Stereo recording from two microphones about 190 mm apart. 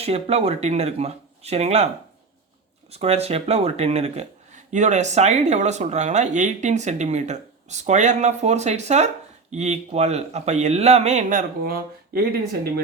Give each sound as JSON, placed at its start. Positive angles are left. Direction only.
{"t": 0.0, "sound": "speech", "side_deg": -35}
{"t": 2.9, "sound": "speech", "side_deg": -35}